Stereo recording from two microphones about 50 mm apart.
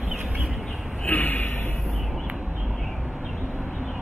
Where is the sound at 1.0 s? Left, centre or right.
Left.